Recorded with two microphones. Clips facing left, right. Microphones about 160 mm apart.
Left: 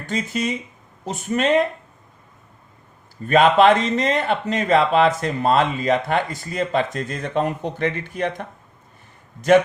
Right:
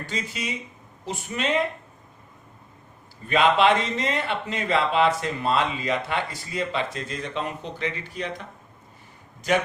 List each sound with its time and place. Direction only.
0.0 s speech: 50° left (ahead or behind)
3.2 s speech: 45° left (ahead or behind)